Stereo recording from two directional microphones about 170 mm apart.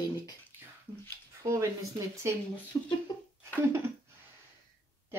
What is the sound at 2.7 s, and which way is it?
Speech, 25° left (ahead or behind).